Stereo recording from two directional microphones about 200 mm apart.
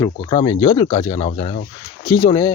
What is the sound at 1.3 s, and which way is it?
Speech, 35° left (ahead or behind).